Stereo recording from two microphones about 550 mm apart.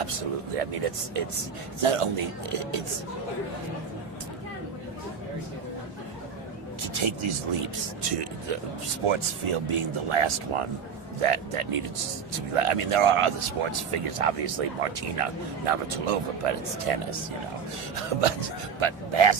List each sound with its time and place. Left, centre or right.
0.0 s speech: right
1.8 s speech: right
6.8 s speech: right
9.0 s speech: right
18.1 s speech: right
18.8 s speech: right